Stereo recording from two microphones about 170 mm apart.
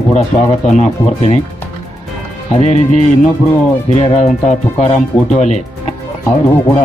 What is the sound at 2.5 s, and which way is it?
Speech, 40° left (ahead or behind).